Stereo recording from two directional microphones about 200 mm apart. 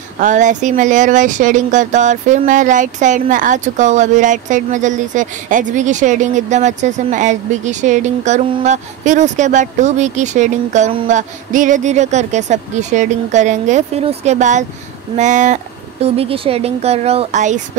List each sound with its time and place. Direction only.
0.2 s speech: 40° right (ahead or behind)